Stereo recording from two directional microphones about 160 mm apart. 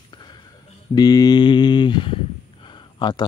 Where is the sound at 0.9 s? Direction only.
25° left (ahead or behind).